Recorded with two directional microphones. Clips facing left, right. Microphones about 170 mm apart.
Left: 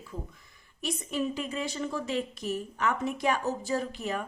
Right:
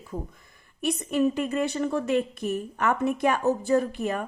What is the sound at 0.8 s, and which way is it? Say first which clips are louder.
A woman's voice: right 7 dB; 60° right (ahead or behind).